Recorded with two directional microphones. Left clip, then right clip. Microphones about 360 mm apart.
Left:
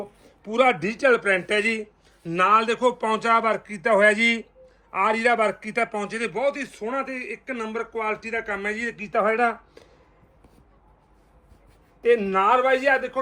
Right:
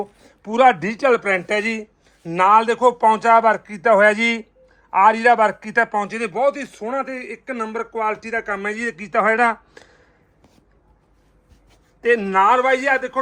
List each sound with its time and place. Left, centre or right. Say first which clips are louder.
0.3 s a man's voice: right 6 dB; right
12.0 s a man's voice: right 4 dB; right